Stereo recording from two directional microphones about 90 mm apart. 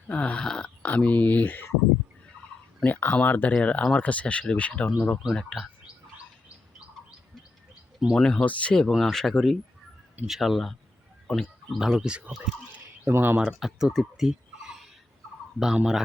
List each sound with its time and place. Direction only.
0.1 s speech: 15° left (ahead or behind)
2.8 s speech: 20° left (ahead or behind)
8.1 s speech: 10° left (ahead or behind); by 13.4 s 25° right (ahead or behind)
13.4 s speech: 5° right (ahead or behind)